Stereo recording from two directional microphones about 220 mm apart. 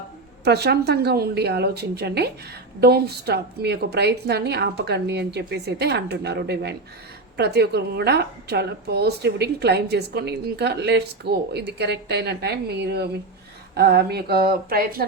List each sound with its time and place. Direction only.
0.4 s a woman's voice: 45° right (ahead or behind)